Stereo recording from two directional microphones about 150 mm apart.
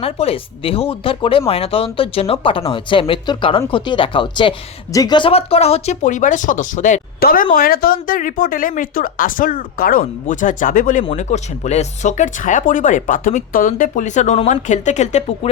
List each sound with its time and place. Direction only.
0.0 s speech: 40° left (ahead or behind); by 11.0 s 65° left (ahead or behind)
11.0 s speech: 45° left (ahead or behind)